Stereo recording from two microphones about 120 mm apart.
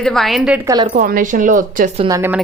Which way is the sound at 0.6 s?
35° right (ahead or behind).